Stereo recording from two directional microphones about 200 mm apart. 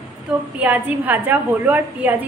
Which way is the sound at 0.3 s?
10° right (ahead or behind).